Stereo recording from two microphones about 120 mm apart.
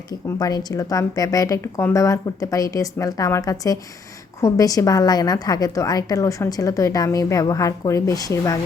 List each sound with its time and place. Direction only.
0.1 s a woman's voice: 30° left (ahead or behind)